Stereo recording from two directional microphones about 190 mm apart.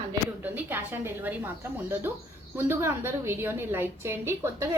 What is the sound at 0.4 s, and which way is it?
Speech, 10° right (ahead or behind).